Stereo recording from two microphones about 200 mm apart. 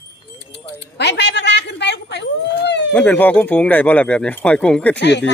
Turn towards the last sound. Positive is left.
turn(degrees=60)  # may be behind; listen again after turning